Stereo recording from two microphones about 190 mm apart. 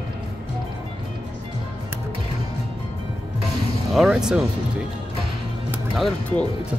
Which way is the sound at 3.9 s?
Centre (ahead or behind).